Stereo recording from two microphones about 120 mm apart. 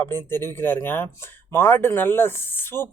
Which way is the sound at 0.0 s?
20° left (ahead or behind).